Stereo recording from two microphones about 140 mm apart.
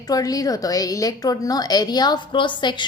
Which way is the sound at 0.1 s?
25° left (ahead or behind).